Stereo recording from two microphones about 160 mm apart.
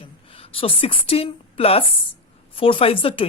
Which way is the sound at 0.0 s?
35° left (ahead or behind).